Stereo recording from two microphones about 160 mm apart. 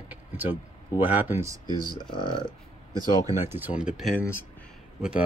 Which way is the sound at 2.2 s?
30° left (ahead or behind).